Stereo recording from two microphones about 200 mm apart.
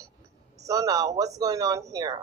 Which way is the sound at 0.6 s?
15° right (ahead or behind).